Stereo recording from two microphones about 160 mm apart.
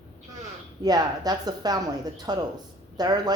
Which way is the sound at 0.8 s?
25° right (ahead or behind).